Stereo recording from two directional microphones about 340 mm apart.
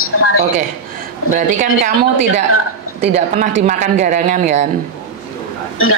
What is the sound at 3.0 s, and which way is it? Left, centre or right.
Speech, centre.